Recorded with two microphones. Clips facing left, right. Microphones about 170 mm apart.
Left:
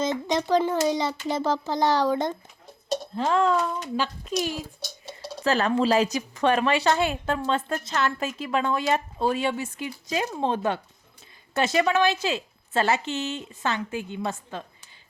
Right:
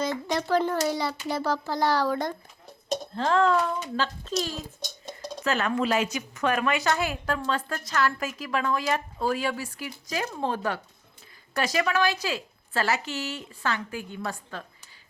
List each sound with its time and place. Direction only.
0.0 s a woman's voice: 20° left (ahead or behind)
3.2 s speech: 10° left (ahead or behind)
5.4 s a woman's voice: 35° left (ahead or behind)